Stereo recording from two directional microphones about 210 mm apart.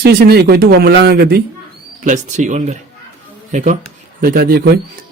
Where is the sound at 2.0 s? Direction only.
35° right (ahead or behind).